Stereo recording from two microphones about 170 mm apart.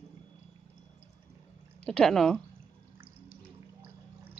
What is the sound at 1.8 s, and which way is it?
Speech, 5° left (ahead or behind).